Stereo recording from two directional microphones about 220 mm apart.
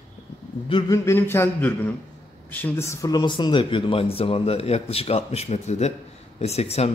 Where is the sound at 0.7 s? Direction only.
20° left (ahead or behind).